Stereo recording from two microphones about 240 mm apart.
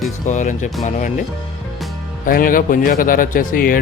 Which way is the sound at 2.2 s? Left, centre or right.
Left.